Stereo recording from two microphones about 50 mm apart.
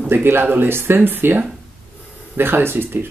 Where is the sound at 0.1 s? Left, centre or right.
Right.